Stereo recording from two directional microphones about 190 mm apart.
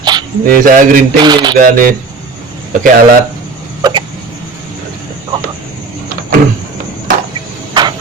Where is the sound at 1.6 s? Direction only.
45° right (ahead or behind).